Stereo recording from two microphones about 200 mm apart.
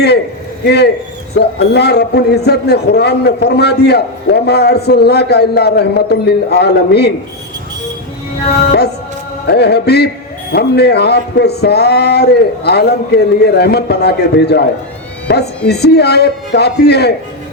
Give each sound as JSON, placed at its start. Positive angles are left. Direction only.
{"t": 0.6, "sound": "a man's voice", "side_deg": 55}
{"t": 9.5, "sound": "a man's voice", "side_deg": 55}